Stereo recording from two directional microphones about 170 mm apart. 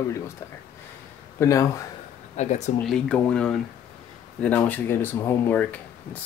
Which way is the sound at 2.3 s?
45° left (ahead or behind).